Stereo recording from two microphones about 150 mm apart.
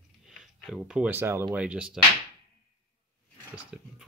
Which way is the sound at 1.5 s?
5° right (ahead or behind).